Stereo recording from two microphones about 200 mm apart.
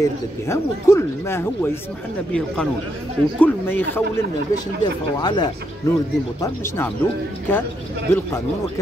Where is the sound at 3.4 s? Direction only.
10° left (ahead or behind).